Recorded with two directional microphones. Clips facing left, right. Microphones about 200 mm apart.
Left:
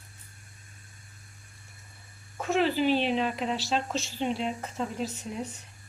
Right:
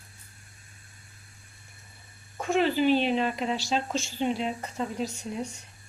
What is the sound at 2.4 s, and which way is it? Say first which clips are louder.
Speech: right 1 dB; centre (ahead or behind).